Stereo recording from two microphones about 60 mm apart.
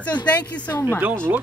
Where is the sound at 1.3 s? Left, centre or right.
Right.